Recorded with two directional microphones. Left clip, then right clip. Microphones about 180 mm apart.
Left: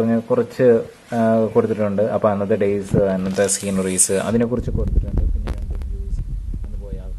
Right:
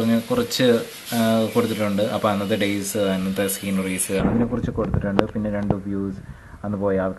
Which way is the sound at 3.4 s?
60° left (ahead or behind).